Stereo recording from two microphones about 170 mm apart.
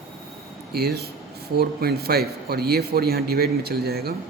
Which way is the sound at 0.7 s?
65° right (ahead or behind).